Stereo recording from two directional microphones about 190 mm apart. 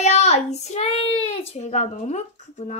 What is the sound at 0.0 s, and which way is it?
A child's voice, 35° left (ahead or behind).